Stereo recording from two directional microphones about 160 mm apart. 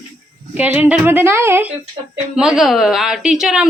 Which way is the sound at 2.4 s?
5° right (ahead or behind).